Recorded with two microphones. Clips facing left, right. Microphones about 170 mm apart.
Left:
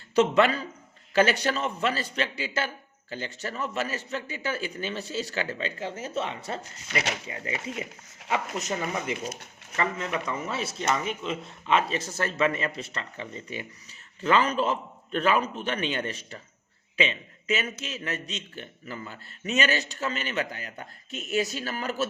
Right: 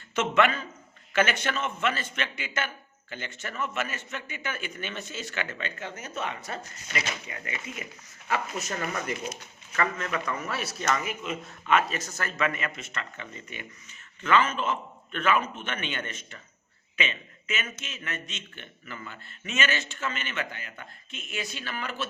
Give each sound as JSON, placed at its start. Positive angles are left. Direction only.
{"t": 0.2, "sound": "a man's voice", "side_deg": 35}
{"t": 8.3, "sound": "a man's voice", "side_deg": 20}
{"t": 10.9, "sound": "speech", "side_deg": -5}
{"t": 11.2, "sound": "a man's voice", "side_deg": 30}